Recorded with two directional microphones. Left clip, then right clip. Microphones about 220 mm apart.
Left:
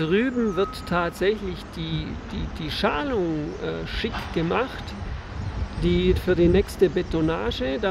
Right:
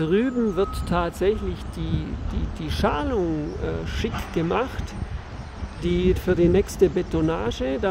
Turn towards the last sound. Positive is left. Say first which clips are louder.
# even
turn(degrees=-5)  # may be behind; listen again after turning